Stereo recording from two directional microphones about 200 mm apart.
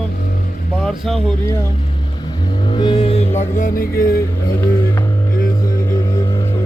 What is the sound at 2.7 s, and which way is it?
Music, 25° left (ahead or behind).